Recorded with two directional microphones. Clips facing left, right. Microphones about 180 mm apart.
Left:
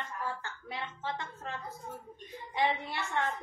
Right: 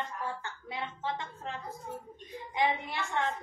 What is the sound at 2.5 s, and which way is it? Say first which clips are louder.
Speech: right 1 dB; 15° right (ahead or behind).